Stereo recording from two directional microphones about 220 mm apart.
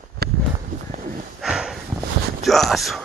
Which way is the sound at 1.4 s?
5° right (ahead or behind).